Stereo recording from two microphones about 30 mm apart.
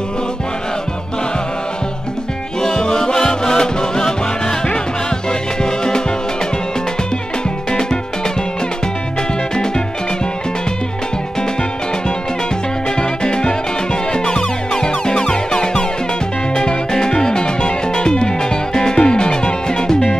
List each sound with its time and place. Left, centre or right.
2.6 s music: left
5.6 s music: left
13.2 s music: left